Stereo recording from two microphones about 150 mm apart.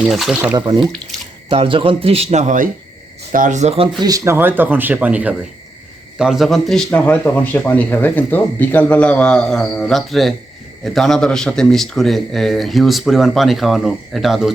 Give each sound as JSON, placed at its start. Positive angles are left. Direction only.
{"t": 0.0, "sound": "a man's voice", "side_deg": 0}
{"t": 0.5, "sound": "speech", "side_deg": -25}
{"t": 4.0, "sound": "a man's voice", "side_deg": -25}